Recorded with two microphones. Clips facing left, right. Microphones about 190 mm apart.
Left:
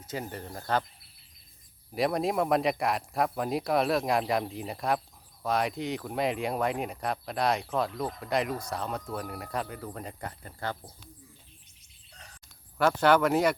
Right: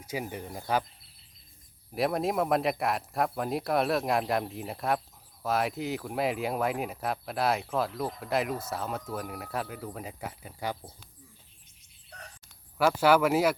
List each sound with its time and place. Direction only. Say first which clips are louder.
0.0 s speech: right 1 dB; 10° right (ahead or behind)
1.9 s speech: even; centre (ahead or behind)
12.1 s a sound: right 6 dB; 65° right (ahead or behind)
12.7 s speech: even; 5° right (ahead or behind)